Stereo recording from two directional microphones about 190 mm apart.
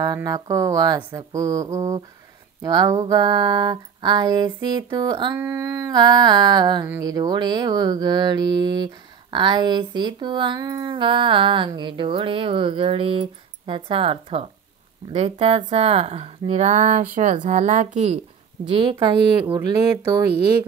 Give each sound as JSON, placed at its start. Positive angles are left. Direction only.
{"t": 0.0, "sound": "speech", "side_deg": -20}
{"t": 2.6, "sound": "mantra", "side_deg": -20}
{"t": 15.1, "sound": "speech", "side_deg": -30}
{"t": 18.8, "sound": "mantra", "side_deg": -25}
{"t": 20.2, "sound": "speech", "side_deg": -55}